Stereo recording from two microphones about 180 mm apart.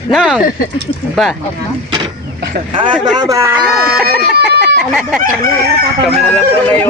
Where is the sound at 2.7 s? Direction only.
30° right (ahead or behind).